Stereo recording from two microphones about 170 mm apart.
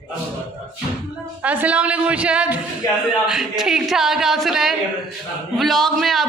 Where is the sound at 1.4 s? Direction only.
10° right (ahead or behind).